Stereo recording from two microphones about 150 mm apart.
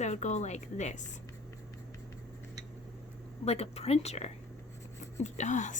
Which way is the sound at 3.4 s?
45° left (ahead or behind).